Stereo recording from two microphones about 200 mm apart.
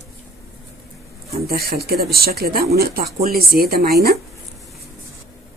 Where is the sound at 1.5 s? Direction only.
50° right (ahead or behind).